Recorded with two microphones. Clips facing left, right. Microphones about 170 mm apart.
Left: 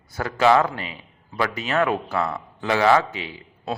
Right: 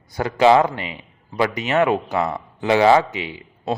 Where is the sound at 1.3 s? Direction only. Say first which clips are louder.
Right 4 dB; 20° right (ahead or behind).